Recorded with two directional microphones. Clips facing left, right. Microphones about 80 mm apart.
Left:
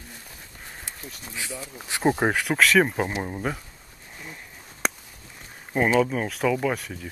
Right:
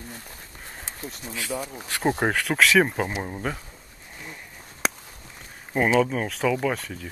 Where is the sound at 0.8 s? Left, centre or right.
Right.